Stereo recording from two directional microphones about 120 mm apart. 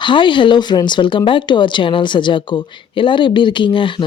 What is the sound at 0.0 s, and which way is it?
Speech, 40° left (ahead or behind).